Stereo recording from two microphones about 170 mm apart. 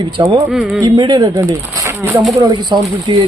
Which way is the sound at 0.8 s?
25° right (ahead or behind).